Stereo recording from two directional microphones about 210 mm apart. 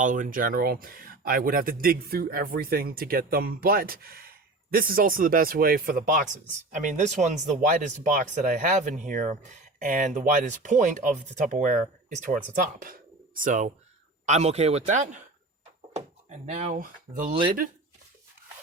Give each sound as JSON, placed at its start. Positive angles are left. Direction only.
{"t": 0.0, "sound": "speech", "side_deg": -40}
{"t": 16.5, "sound": "speech", "side_deg": -30}